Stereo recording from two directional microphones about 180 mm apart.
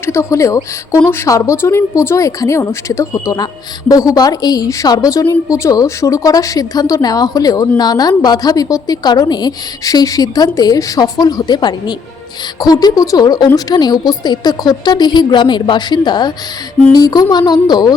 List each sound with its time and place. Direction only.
0.0 s a woman's voice: 15° left (ahead or behind)